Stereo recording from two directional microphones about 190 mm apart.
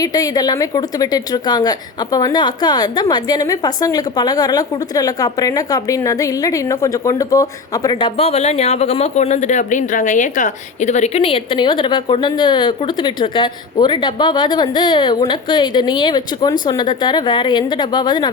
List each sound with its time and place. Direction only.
0.0 s speech: 20° left (ahead or behind)
7.9 s speech: 30° left (ahead or behind)